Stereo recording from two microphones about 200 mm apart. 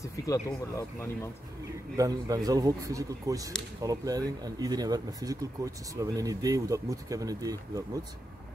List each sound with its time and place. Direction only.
0.7 s speech: 15° left (ahead or behind)
2.0 s speech: 15° right (ahead or behind)